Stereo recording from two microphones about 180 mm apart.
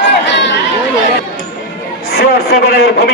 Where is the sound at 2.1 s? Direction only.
60° left (ahead or behind).